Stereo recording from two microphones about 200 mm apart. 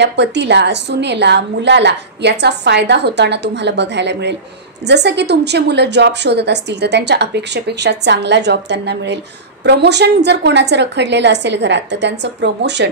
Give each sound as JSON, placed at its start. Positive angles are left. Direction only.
{"t": 0.0, "sound": "a woman's voice", "side_deg": -60}